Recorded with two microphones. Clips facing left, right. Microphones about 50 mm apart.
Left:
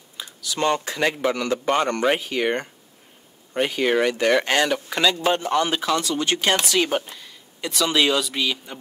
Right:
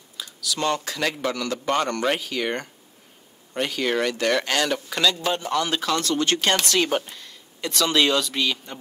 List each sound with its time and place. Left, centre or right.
0.2 s a man's voice: left; by 8.7 s centre